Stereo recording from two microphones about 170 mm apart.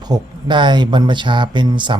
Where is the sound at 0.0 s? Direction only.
25° right (ahead or behind).